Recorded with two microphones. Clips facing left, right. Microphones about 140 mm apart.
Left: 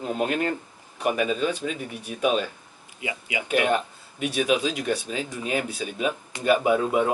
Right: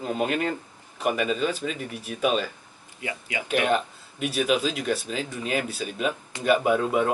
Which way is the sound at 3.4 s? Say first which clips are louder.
Left 1 dB; 5° left (ahead or behind).